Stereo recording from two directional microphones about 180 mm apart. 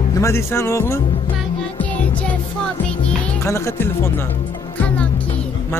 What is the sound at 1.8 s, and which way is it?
Music, 10° left (ahead or behind).